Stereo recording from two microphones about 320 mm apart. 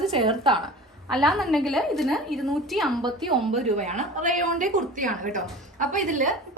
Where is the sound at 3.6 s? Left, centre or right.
Right.